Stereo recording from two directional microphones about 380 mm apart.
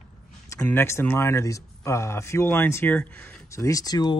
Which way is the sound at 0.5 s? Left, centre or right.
Centre.